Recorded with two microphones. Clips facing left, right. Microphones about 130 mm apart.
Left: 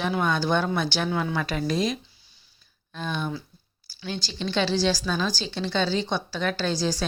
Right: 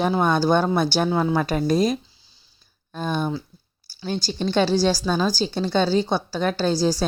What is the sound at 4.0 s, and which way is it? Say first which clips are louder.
Speech: right 6 dB; 40° right (ahead or behind).